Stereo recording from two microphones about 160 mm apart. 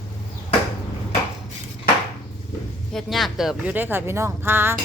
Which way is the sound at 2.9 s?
Centre (ahead or behind).